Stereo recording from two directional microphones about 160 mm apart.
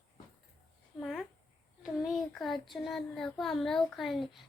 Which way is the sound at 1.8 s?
Centre (ahead or behind).